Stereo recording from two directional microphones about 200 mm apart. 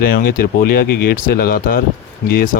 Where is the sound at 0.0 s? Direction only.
50° left (ahead or behind).